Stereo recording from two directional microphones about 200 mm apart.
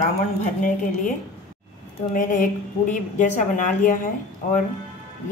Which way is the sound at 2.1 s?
40° left (ahead or behind).